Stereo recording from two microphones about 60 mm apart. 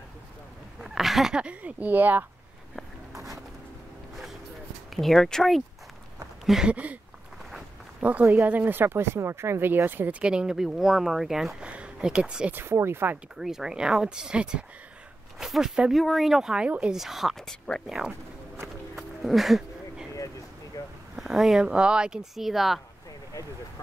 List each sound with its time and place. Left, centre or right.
0.7 s a sound: centre
1.3 s speech: centre
4.9 s speech: centre
6.7 s speech: right
8.0 s speech: right
10.2 s speech: centre
11.6 s speech: centre
12.5 s speech: right
13.4 s speech: centre
17.5 s speech: centre
18.9 s a sound: centre
20.1 s a sound: left
21.2 s speech: centre